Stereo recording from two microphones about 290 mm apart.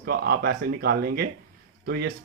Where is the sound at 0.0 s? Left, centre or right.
Right.